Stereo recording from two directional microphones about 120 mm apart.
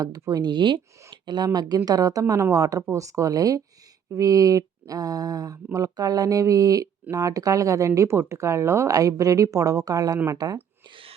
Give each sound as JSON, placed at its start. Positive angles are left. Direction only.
{"t": 0.0, "sound": "speech", "side_deg": -30}
{"t": 1.1, "sound": "a sound", "side_deg": -40}
{"t": 1.5, "sound": "speech", "side_deg": -35}